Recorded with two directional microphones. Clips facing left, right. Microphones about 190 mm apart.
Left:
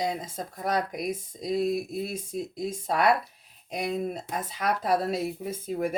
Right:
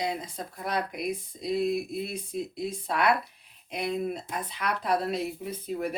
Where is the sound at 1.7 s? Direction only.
Centre (ahead or behind).